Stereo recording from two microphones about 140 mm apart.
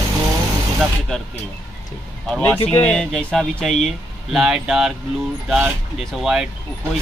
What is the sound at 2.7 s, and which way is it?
Speech, 10° left (ahead or behind).